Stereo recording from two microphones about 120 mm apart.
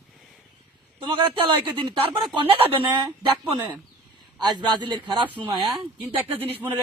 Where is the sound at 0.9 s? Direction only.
45° right (ahead or behind).